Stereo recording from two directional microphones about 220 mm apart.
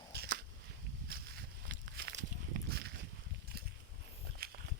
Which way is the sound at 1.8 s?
50° right (ahead or behind).